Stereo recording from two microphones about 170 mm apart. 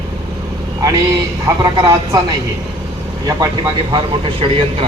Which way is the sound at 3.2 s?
20° right (ahead or behind).